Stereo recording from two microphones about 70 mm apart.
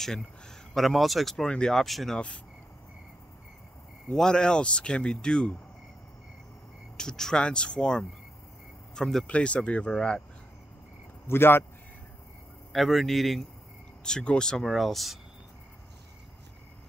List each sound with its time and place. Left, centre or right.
0.0 s a man's voice: centre
2.1 s speech: centre
4.1 s speech: centre
7.0 s speech: centre
11.2 s speech: left
12.7 s a man's voice: centre
14.0 s speech: centre